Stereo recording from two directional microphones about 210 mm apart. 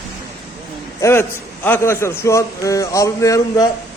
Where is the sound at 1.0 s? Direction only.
10° left (ahead or behind).